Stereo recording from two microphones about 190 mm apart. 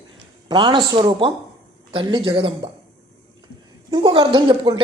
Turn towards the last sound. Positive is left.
turn(degrees=-25)  # may be behind; listen again after turning